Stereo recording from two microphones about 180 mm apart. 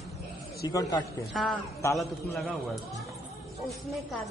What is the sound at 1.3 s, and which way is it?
A woman's voice, centre (ahead or behind).